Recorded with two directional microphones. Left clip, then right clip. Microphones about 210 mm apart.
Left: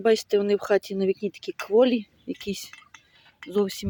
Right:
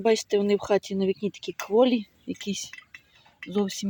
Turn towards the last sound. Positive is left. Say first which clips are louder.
# left 2 dB
turn(degrees=30)  # may be behind; listen again after turning